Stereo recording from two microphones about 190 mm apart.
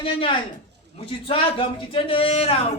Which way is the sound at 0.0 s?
25° left (ahead or behind).